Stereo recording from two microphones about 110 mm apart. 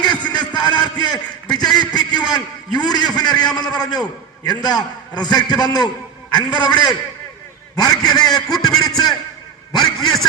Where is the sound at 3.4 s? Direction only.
40° left (ahead or behind).